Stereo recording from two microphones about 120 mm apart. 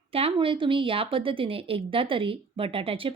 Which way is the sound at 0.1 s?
50° right (ahead or behind).